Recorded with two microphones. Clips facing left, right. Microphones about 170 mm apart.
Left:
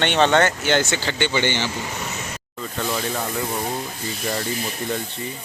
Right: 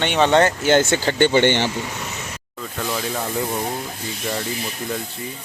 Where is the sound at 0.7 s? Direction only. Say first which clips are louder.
Right 4 dB; 50° right (ahead or behind).